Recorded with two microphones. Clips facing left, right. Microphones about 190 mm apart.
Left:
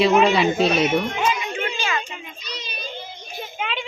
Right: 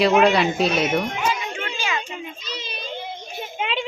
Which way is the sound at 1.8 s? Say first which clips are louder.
Left 1 dB; 15° right (ahead or behind).